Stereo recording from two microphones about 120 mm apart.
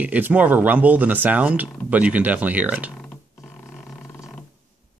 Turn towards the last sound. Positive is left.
turn(degrees=20)  # may be behind; listen again after turning